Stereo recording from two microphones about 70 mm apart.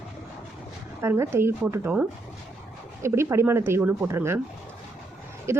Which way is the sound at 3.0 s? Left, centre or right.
Right.